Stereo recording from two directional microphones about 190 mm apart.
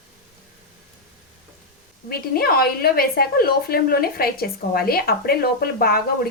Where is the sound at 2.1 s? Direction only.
55° left (ahead or behind).